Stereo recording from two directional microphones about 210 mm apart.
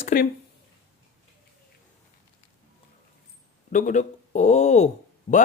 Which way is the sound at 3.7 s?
40° left (ahead or behind).